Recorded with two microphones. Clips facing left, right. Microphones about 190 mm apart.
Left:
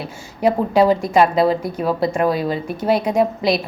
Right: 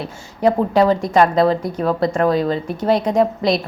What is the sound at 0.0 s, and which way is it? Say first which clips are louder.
A woman's voice: right 1 dB; 5° left (ahead or behind).